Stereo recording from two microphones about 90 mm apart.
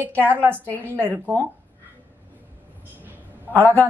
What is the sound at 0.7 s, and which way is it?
Speech, 20° left (ahead or behind).